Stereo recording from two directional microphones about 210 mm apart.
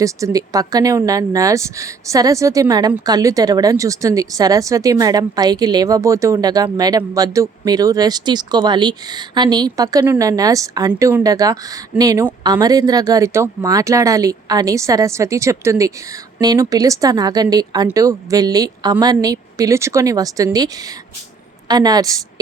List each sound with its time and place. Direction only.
0.0 s speech: 15° right (ahead or behind)
21.7 s a woman's voice: 20° right (ahead or behind)